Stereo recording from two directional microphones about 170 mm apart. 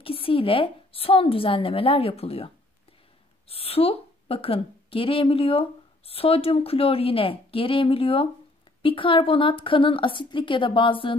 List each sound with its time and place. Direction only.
0.0 s a woman's voice: 35° left (ahead or behind)